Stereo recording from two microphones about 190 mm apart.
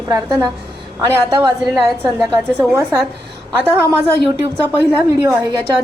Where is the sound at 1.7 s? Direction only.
5° right (ahead or behind).